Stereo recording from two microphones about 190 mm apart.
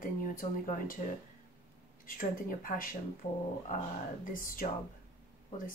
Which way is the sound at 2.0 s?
45° left (ahead or behind).